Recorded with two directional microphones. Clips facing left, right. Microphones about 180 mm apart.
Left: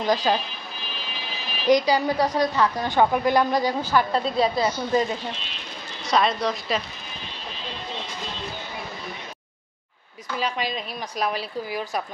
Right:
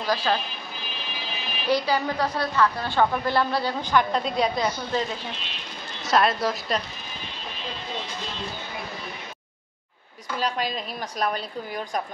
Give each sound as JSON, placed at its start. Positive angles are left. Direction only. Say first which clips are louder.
{"t": 0.0, "sound": "a woman's voice", "louder": "left 3 dB", "side_deg": 15}
{"t": 1.7, "sound": "a woman's voice", "louder": "left 4 dB", "side_deg": 15}
{"t": 6.0, "sound": "a woman's voice", "louder": "even", "side_deg": -5}
{"t": 10.4, "sound": "a woman's voice", "louder": "even", "side_deg": 0}